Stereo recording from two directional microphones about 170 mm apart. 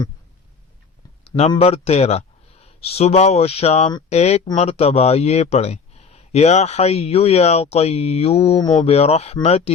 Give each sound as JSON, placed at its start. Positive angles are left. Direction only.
{"t": 1.4, "sound": "speech", "side_deg": 35}